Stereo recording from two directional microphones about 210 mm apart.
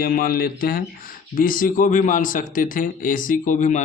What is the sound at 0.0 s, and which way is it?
Speech, 45° left (ahead or behind).